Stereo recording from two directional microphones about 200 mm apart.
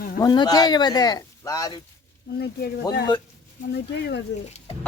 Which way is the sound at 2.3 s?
55° left (ahead or behind).